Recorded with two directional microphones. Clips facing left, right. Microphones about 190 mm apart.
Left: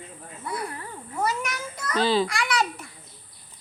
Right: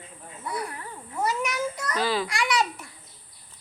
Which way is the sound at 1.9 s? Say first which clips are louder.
Left 5 dB; 25° left (ahead or behind).